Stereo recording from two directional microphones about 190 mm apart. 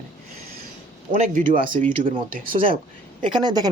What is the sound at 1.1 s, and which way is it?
Speech, 45° right (ahead or behind).